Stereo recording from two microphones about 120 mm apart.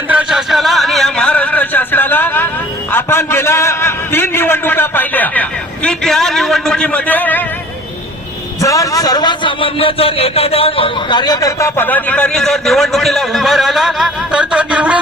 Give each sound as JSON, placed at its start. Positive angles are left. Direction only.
{"t": 0.1, "sound": "a sound", "side_deg": -10}
{"t": 2.9, "sound": "a man's voice", "side_deg": 20}
{"t": 8.6, "sound": "a man's voice", "side_deg": 30}